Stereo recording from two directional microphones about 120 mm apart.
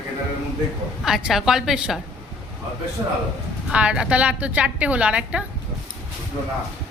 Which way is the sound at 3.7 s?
10° right (ahead or behind).